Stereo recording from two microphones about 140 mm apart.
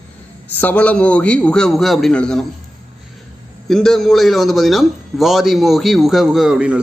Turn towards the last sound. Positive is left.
turn(degrees=-5)  # may be behind; listen again after turning